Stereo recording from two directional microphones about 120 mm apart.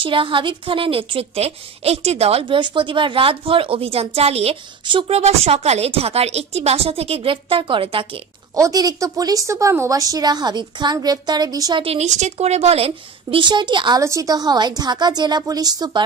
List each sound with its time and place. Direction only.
0.0 s a woman's voice: 45° right (ahead or behind)
2.4 s a woman's voice: 45° right (ahead or behind)
8.5 s a woman's voice: 30° right (ahead or behind)
11.8 s a woman's voice: 60° right (ahead or behind); by 14.0 s 40° right (ahead or behind)
14.0 s a woman's voice: 30° right (ahead or behind)